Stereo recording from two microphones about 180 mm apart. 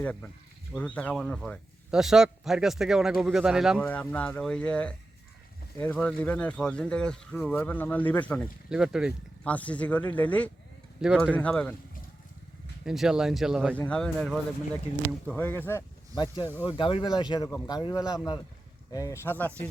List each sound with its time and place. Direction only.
0.0 s a man's voice: 10° left (ahead or behind)
3.8 s speech: 10° left (ahead or behind)
8.7 s a man's voice: 5° right (ahead or behind)
9.4 s speech: 5° left (ahead or behind)
11.0 s speech: 5° right (ahead or behind)
11.3 s speech: 5° left (ahead or behind)
12.8 s a man's voice: 5° right (ahead or behind)
13.7 s a man's voice: 5° left (ahead or behind)
16.1 s speech: 25° left (ahead or behind); by 19.6 s 10° left (ahead or behind)